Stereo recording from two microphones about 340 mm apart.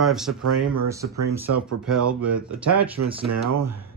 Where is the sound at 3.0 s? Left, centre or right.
Right.